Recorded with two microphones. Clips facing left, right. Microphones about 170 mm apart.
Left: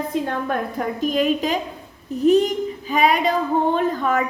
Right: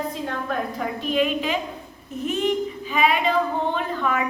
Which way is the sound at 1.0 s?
40° left (ahead or behind).